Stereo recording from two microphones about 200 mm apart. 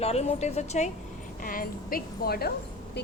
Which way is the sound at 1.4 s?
45° left (ahead or behind).